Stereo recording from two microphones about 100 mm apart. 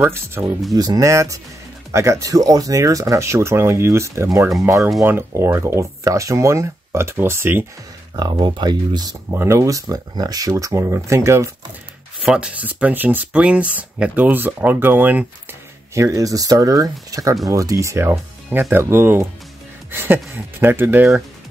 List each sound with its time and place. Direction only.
0.0 s speech: 25° right (ahead or behind)
0.7 s speech: 40° right (ahead or behind); by 7.6 s 25° right (ahead or behind)
8.2 s speech: 50° right (ahead or behind)
9.3 s speech: 25° right (ahead or behind)
12.3 s speech: 10° right (ahead or behind)
15.9 s speech: 35° right (ahead or behind)